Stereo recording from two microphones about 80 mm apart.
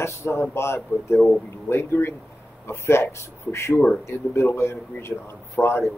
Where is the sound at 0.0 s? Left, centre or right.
Left.